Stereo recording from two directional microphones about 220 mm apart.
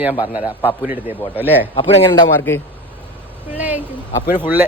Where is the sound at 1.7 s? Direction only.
25° left (ahead or behind).